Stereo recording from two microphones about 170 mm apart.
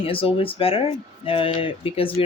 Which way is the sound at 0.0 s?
30° left (ahead or behind).